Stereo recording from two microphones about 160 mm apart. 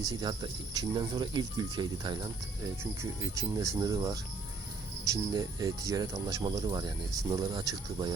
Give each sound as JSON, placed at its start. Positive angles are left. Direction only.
{"t": 0.0, "sound": "speech", "side_deg": -25}
{"t": 3.2, "sound": "speech", "side_deg": -20}